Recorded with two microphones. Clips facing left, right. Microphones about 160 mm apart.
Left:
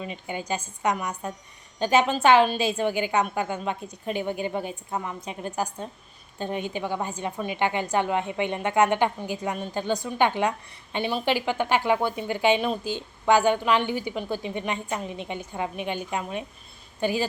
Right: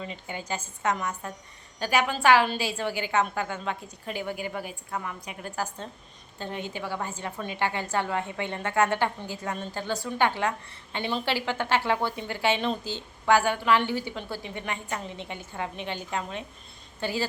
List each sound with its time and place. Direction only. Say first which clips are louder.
0.0 s a woman's voice: left 3 dB; 20° left (ahead or behind)